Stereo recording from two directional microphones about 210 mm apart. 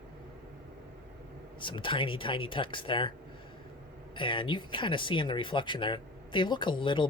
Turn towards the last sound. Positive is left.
turn(degrees=25)  # may be behind; listen again after turning